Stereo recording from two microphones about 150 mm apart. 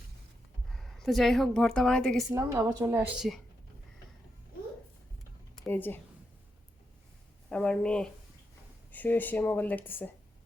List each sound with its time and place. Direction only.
0.7 s a woman's voice: centre (ahead or behind)
2.3 s a woman's voice: 15° right (ahead or behind)
3.2 s speech: centre (ahead or behind)
5.6 s speech: 15° left (ahead or behind)
7.5 s speech: 5° left (ahead or behind)